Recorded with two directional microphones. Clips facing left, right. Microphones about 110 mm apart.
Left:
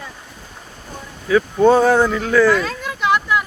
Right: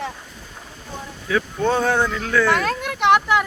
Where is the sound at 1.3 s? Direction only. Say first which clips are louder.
Left 8 dB; 5° left (ahead or behind).